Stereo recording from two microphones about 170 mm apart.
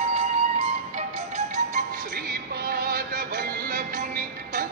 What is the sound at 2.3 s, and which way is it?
Music, 60° right (ahead or behind).